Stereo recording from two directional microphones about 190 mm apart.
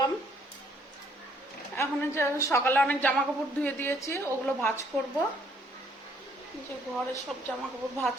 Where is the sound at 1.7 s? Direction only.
15° left (ahead or behind).